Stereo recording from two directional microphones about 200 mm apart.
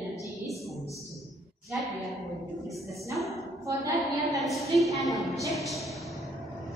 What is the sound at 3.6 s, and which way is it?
Speech, 15° right (ahead or behind).